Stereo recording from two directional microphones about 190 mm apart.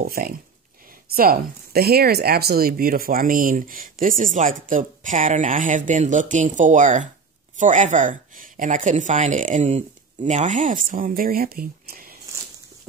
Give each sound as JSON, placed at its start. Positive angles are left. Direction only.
{"t": 0.0, "sound": "a woman's voice", "side_deg": -50}